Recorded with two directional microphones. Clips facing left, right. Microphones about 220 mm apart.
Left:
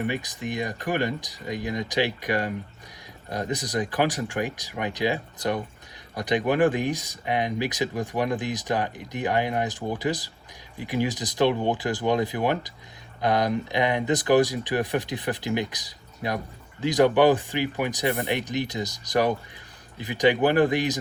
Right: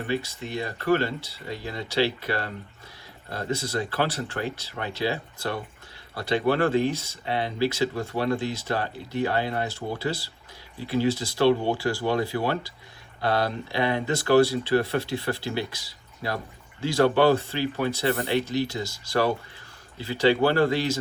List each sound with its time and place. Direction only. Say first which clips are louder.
0.1 s speech: right 1 dB; 15° left (ahead or behind)